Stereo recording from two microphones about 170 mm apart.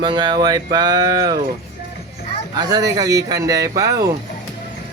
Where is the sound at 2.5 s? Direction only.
25° right (ahead or behind).